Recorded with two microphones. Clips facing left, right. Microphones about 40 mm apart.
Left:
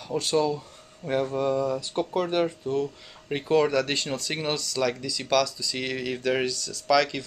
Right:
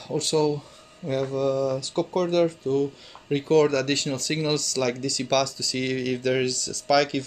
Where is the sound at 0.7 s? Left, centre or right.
Centre.